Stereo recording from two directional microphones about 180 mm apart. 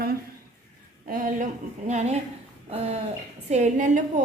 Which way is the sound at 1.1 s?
45° right (ahead or behind).